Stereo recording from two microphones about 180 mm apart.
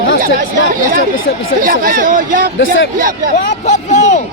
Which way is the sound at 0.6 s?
50° right (ahead or behind).